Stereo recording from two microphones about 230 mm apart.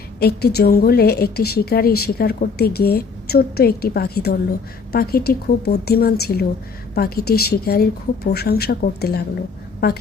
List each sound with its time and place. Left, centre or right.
0.2 s a woman's voice: left